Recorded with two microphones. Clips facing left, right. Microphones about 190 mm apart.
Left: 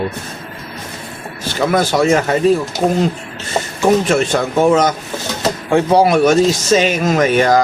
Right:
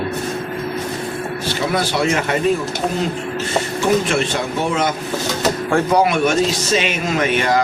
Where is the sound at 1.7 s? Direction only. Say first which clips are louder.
Left 6 dB; 45° left (ahead or behind).